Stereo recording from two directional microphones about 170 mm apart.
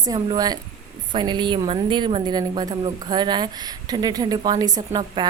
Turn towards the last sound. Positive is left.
turn(degrees=-25)  # may be behind; listen again after turning